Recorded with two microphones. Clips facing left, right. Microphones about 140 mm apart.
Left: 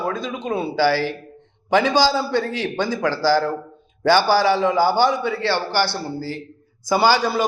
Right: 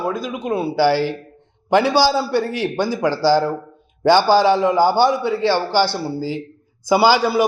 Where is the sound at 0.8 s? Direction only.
15° right (ahead or behind).